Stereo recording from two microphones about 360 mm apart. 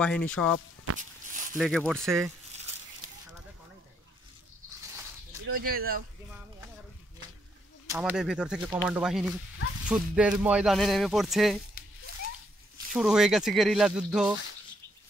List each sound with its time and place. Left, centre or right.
0.0 s speech: centre
0.9 s a sound: right
1.6 s speech: centre
3.0 s a sound: right
5.7 s speech: right
7.9 s speech: centre
12.9 s speech: centre